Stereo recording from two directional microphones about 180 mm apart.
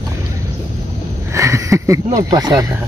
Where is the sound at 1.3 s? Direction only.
15° right (ahead or behind).